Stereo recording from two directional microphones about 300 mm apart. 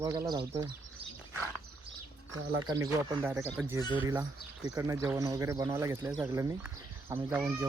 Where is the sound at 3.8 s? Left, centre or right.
Centre.